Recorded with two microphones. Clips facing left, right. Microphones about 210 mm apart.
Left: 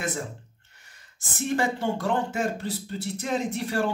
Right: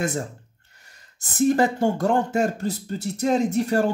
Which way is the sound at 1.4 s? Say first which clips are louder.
Right 7 dB; 40° right (ahead or behind).